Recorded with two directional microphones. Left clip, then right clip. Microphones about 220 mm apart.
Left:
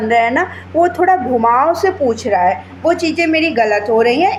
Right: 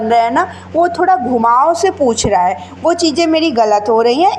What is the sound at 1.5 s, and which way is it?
A woman's voice, 25° right (ahead or behind).